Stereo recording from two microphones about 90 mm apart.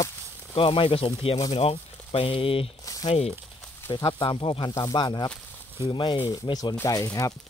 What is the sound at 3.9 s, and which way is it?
Speech, 55° left (ahead or behind).